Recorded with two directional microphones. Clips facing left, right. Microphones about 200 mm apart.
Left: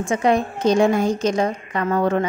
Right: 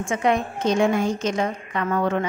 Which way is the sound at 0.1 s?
35° left (ahead or behind).